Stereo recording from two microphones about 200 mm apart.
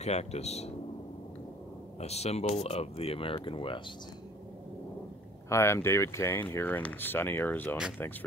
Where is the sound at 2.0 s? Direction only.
30° left (ahead or behind).